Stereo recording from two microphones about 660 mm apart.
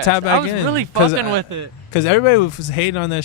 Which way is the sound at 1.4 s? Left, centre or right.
Right.